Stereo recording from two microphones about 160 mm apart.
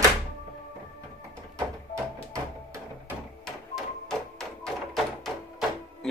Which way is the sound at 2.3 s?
20° right (ahead or behind).